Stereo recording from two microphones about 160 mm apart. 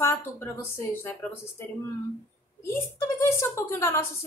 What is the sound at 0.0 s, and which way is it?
A woman's voice, 15° left (ahead or behind).